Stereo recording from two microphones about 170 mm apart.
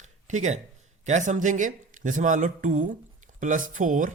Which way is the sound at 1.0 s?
45° right (ahead or behind).